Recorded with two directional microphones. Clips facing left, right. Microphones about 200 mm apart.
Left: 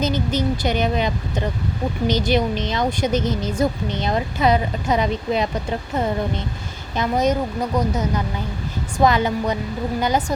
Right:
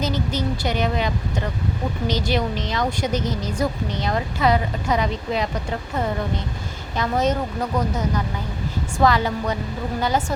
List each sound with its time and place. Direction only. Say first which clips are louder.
0.0 s a woman's voice: left 3 dB; 20° left (ahead or behind)
6.9 s a woman's voice: left 2 dB; 20° left (ahead or behind)